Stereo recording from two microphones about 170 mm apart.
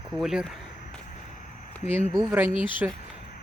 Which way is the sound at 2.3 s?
10° right (ahead or behind).